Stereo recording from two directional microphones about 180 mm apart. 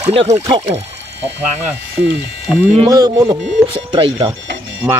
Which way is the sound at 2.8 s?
20° right (ahead or behind).